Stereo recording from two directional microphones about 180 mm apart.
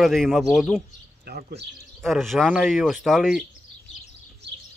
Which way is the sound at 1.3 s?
60° right (ahead or behind).